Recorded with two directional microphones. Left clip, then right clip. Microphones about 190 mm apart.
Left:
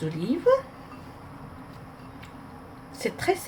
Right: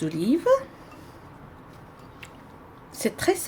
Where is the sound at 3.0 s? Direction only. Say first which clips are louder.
Right 2 dB; 55° right (ahead or behind).